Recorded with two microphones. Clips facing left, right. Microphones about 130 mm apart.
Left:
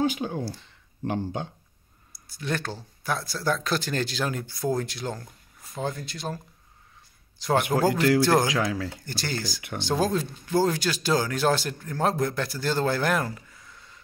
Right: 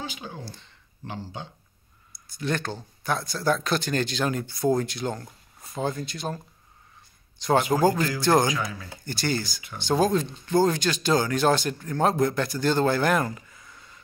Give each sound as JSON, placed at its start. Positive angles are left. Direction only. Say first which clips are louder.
{"t": 0.0, "sound": "speech", "louder": "left 11 dB", "side_deg": 50}
{"t": 0.4, "sound": "speech", "louder": "left 8 dB", "side_deg": 5}
{"t": 1.0, "sound": "speech", "louder": "left 7 dB", "side_deg": 55}
{"t": 2.2, "sound": "speech", "louder": "right 2 dB", "side_deg": 5}
{"t": 8.5, "sound": "speech", "louder": "left 3 dB", "side_deg": 90}
{"t": 9.0, "sound": "speech", "louder": "right 4 dB", "side_deg": 0}